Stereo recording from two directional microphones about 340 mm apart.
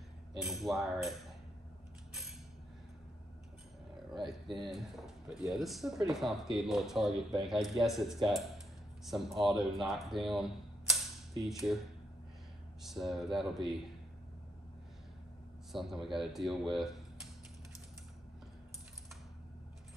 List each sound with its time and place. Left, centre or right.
0.4 s speech: centre
4.6 s speech: centre
12.8 s speech: centre
15.7 s speech: centre